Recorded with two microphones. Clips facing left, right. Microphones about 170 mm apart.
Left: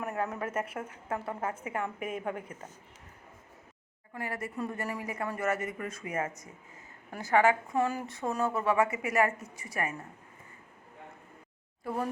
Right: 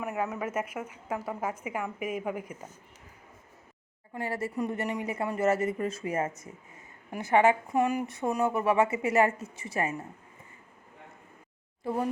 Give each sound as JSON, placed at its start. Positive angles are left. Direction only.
{"t": 0.0, "sound": "a woman's voice", "side_deg": -5}
{"t": 4.1, "sound": "a woman's voice", "side_deg": -30}